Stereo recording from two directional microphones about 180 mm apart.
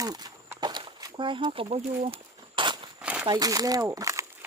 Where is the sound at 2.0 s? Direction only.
30° right (ahead or behind).